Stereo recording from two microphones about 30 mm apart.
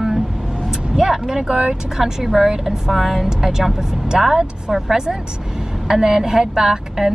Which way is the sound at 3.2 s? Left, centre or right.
Centre.